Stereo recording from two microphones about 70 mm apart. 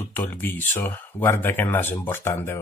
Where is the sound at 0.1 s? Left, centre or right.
Left.